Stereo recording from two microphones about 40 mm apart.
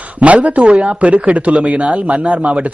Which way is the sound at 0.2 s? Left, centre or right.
Right.